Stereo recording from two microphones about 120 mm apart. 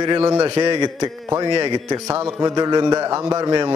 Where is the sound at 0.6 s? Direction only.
35° right (ahead or behind).